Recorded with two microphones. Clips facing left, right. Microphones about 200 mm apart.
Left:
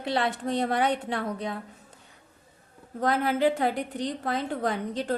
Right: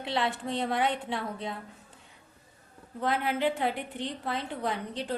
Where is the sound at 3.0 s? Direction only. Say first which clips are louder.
Left 4 dB; 40° left (ahead or behind).